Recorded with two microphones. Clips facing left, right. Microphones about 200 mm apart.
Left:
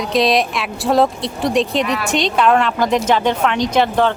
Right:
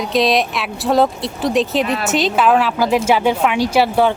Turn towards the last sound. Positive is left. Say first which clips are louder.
# right 1 dB
turn(degrees=-10)  # may be behind; listen again after turning